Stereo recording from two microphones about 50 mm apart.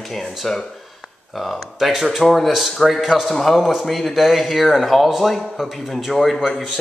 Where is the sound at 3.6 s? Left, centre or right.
Centre.